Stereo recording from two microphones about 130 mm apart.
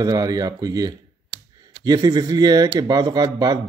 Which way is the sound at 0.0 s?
25° right (ahead or behind).